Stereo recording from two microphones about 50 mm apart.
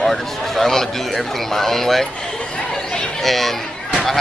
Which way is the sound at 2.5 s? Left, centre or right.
Centre.